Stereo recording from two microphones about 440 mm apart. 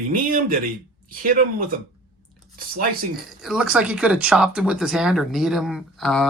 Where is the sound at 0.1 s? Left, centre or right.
Centre.